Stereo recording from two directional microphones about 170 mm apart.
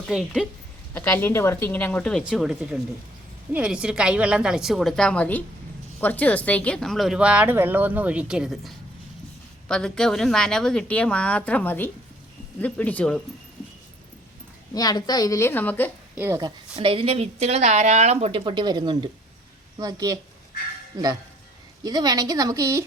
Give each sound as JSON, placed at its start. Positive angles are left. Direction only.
{"t": 0.1, "sound": "speech", "side_deg": -5}
{"t": 0.9, "sound": "a woman's voice", "side_deg": 10}
{"t": 14.7, "sound": "a woman's voice", "side_deg": 20}
{"t": 16.1, "sound": "a woman's voice", "side_deg": -15}
{"t": 16.7, "sound": "a woman's voice", "side_deg": -35}
{"t": 21.8, "sound": "a woman's voice", "side_deg": -20}